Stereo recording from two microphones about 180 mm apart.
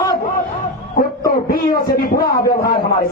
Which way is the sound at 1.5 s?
55° left (ahead or behind).